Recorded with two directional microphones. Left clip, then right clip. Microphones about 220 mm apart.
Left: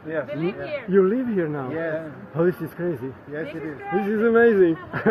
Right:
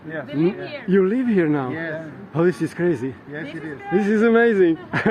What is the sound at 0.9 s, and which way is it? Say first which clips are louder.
A man's voice: right 1 dB; 30° right (ahead or behind).